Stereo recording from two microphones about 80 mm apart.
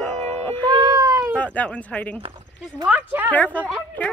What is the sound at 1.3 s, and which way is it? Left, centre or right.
Speech, centre.